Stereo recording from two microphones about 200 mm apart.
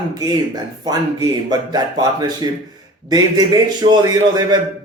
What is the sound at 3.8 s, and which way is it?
Speech, 20° right (ahead or behind).